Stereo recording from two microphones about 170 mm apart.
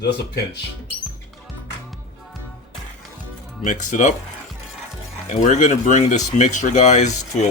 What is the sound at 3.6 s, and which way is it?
Speech, 45° left (ahead or behind).